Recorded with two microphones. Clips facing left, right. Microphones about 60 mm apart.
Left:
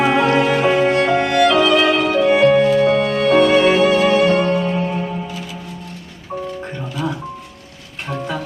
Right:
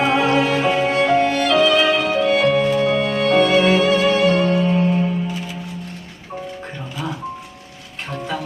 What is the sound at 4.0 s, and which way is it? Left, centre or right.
Music, left.